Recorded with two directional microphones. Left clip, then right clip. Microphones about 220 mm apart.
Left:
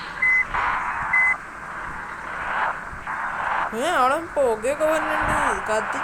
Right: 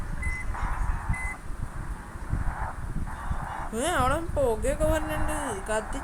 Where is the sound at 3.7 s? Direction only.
Centre (ahead or behind).